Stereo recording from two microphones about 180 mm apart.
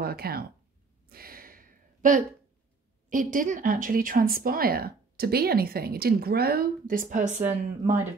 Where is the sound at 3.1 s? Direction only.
45° right (ahead or behind).